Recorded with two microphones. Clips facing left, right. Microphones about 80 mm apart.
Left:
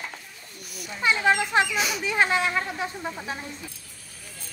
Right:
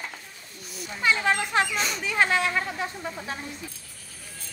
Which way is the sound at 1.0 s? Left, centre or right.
Centre.